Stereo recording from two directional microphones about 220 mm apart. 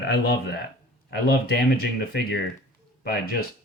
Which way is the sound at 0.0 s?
50° left (ahead or behind).